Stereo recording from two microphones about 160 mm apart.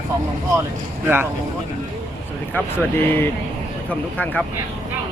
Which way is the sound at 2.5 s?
15° left (ahead or behind).